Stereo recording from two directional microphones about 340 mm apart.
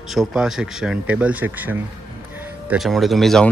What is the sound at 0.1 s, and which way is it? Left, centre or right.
Speech, centre.